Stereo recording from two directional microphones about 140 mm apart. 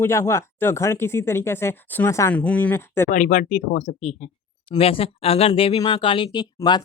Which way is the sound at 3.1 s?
65° left (ahead or behind).